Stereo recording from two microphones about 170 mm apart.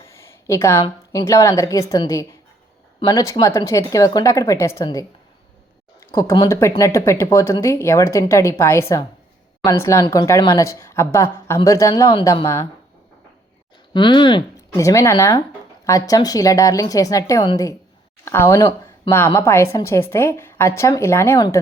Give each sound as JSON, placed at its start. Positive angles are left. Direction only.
{"t": 0.0, "sound": "a woman's voice", "side_deg": 15}
{"t": 6.1, "sound": "a woman's voice", "side_deg": 20}
{"t": 13.9, "sound": "a woman's voice", "side_deg": 30}
{"t": 14.5, "sound": "a woman's voice", "side_deg": 20}